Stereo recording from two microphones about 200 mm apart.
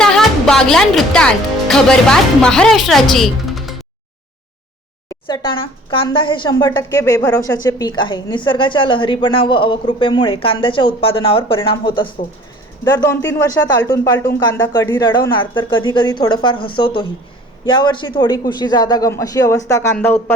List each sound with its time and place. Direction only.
0.0 s speech: 5° left (ahead or behind)
5.2 s a man's voice: 25° left (ahead or behind)